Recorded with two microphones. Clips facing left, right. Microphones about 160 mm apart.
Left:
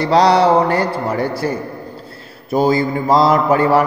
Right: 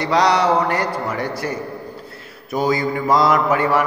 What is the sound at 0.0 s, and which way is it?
Mantra, 30° left (ahead or behind).